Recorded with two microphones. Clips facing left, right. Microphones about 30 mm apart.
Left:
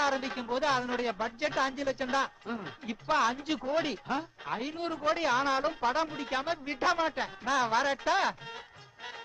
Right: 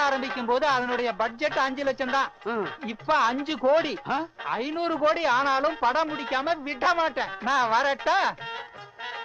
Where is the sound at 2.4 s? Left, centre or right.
Right.